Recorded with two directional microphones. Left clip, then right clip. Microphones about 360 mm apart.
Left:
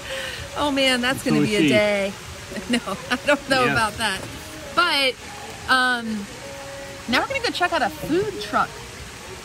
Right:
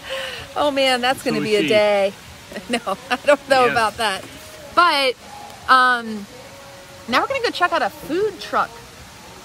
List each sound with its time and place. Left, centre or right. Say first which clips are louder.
0.1 s speech: right 4 dB; centre
7.1 s speech: right 3 dB; centre